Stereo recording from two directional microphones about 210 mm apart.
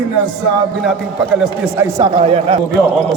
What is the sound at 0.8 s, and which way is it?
A man's voice, centre (ahead or behind).